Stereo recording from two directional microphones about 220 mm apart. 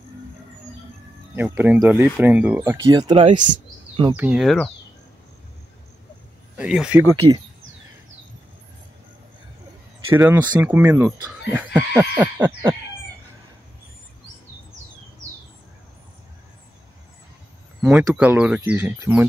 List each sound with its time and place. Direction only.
1.3 s speech: 10° right (ahead or behind)
2.9 s speech: 20° right (ahead or behind)
4.2 s speech: 5° right (ahead or behind)
6.5 s speech: 5° right (ahead or behind)
10.0 s speech: 10° right (ahead or behind)
17.8 s speech: 5° right (ahead or behind)